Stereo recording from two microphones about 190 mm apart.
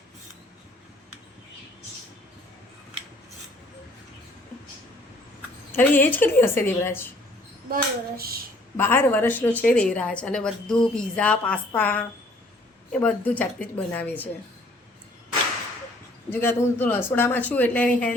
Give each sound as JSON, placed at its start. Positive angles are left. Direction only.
{"t": 5.7, "sound": "a woman's voice", "side_deg": 10}
{"t": 7.7, "sound": "child singing", "side_deg": -50}
{"t": 8.8, "sound": "a woman's voice", "side_deg": 10}
{"t": 16.3, "sound": "a woman's voice", "side_deg": 10}